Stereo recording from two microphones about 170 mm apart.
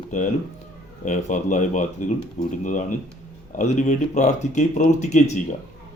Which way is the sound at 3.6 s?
45° left (ahead or behind).